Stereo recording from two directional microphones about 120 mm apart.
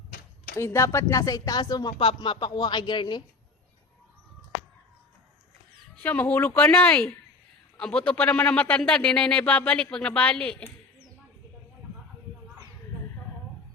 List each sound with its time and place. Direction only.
0.5 s a woman's voice: 25° left (ahead or behind)
2.0 s speech: 45° left (ahead or behind)
6.0 s speech: 15° left (ahead or behind)